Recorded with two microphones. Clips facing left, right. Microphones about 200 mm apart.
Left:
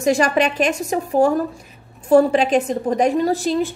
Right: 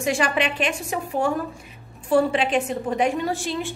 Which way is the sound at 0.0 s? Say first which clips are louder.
Left 6 dB; 40° left (ahead or behind).